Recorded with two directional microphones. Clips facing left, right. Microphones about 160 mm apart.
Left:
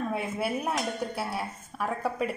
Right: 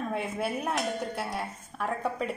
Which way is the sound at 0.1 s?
5° left (ahead or behind).